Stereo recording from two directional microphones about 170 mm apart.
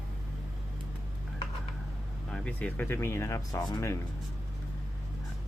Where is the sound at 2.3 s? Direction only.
10° left (ahead or behind).